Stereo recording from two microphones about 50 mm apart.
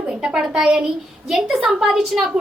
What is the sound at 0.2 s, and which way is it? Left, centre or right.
A woman's voice, centre.